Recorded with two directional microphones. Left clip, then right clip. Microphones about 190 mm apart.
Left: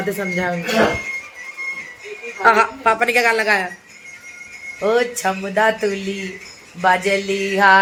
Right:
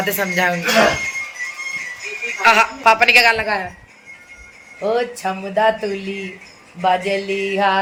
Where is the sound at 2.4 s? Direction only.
10° left (ahead or behind).